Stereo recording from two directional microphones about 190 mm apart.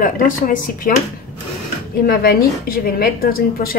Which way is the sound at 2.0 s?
55° left (ahead or behind).